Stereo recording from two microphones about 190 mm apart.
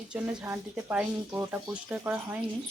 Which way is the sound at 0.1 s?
10° right (ahead or behind).